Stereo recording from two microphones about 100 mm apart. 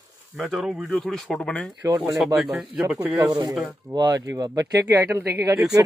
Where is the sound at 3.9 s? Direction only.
40° right (ahead or behind).